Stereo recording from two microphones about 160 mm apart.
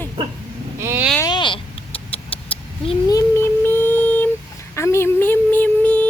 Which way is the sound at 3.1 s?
20° left (ahead or behind).